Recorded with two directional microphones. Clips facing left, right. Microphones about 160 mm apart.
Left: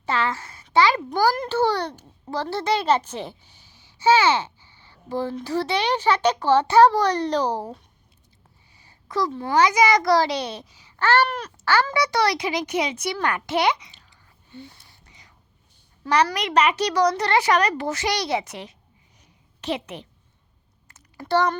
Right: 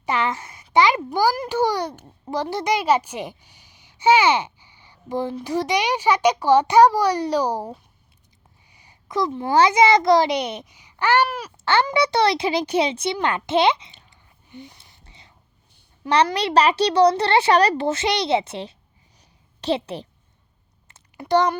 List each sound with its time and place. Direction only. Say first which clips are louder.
0.0 s a woman's voice: right 1 dB; 20° right (ahead or behind)
11.6 s a child's voice: right 2 dB; 20° right (ahead or behind)
14.5 s whispering: right 1 dB; 15° right (ahead or behind)
16.0 s a child's voice: right 2 dB; 25° right (ahead or behind)
19.2 s a sound: right 4 dB; 30° right (ahead or behind)
20.8 s a sound: right 2 dB; 20° right (ahead or behind)